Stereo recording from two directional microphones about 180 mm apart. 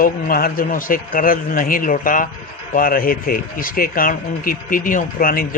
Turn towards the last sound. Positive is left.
turn(degrees=50)  # may be behind; listen again after turning